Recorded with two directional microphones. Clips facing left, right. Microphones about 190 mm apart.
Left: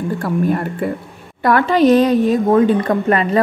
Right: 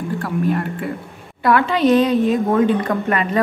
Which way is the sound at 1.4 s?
40° left (ahead or behind).